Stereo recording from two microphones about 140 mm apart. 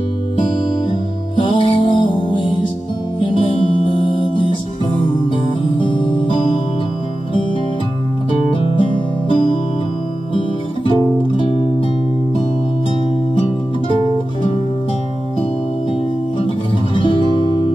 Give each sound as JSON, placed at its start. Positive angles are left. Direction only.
{"t": 1.4, "sound": "music", "side_deg": 35}
{"t": 8.5, "sound": "music", "side_deg": 40}
{"t": 11.0, "sound": "music", "side_deg": 40}
{"t": 16.9, "sound": "music", "side_deg": 35}